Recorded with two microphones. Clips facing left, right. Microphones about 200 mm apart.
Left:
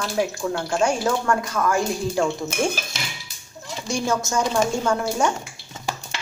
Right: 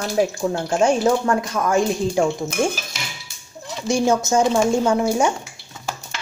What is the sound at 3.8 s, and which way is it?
Speech, 20° right (ahead or behind).